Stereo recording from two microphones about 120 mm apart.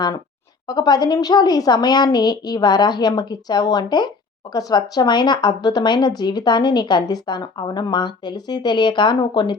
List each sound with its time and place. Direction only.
0.7 s speech: 35° left (ahead or behind)